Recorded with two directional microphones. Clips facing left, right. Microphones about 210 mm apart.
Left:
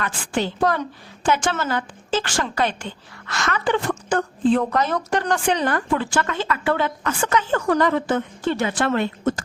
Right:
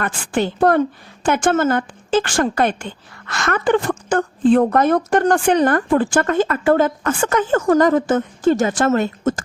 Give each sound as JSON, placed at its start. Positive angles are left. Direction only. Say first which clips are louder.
{"t": 0.0, "sound": "a woman's voice", "louder": "right 4 dB", "side_deg": -50}